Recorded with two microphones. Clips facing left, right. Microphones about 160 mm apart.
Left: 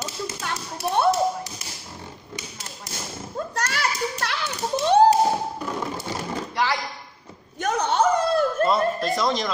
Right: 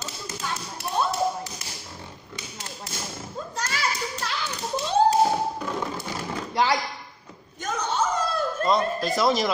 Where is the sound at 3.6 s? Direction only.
70° left (ahead or behind).